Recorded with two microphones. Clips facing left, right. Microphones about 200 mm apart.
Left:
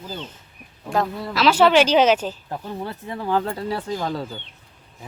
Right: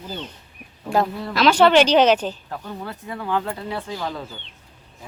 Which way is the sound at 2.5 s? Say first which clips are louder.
Left 2 dB; 25° left (ahead or behind).